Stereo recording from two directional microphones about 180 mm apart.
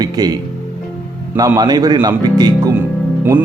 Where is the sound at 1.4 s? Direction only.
20° right (ahead or behind).